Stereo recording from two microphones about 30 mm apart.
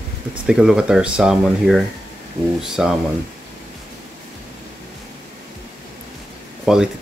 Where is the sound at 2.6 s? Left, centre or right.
Centre.